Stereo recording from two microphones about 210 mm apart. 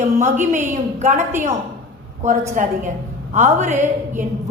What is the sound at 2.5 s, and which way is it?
A woman's voice, 35° right (ahead or behind).